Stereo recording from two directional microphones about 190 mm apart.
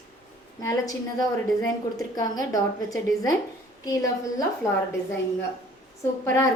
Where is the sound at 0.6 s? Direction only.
15° left (ahead or behind).